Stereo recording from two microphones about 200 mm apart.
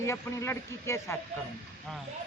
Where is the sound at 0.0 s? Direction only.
15° left (ahead or behind).